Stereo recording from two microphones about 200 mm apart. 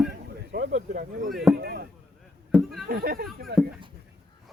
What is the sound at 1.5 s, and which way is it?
Speech, 55° right (ahead or behind).